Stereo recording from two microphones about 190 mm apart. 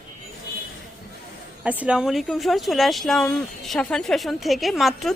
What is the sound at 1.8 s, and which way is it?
Speech, 5° right (ahead or behind).